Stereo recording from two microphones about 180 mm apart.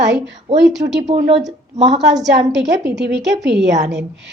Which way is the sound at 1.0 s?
40° right (ahead or behind).